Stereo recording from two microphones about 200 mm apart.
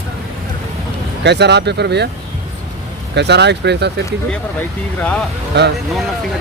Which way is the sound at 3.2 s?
60° right (ahead or behind).